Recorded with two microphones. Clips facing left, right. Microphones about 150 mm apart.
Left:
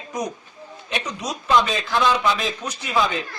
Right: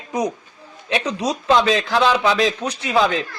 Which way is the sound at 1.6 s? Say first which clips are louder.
Right 4 dB; 80° right.